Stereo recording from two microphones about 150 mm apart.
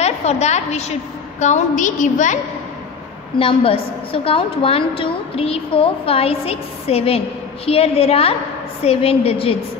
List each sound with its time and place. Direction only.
0.0 s a woman's voice: 45° left (ahead or behind)
3.3 s a woman's voice: 40° left (ahead or behind)